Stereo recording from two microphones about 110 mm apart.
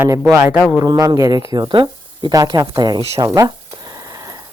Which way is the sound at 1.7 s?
45° right (ahead or behind).